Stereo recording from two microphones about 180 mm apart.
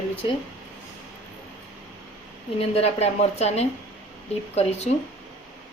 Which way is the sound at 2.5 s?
35° left (ahead or behind).